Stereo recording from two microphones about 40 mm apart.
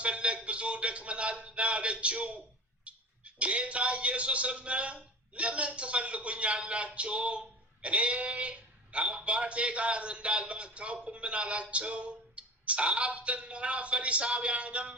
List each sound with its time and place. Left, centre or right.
0.0 s a man's voice: right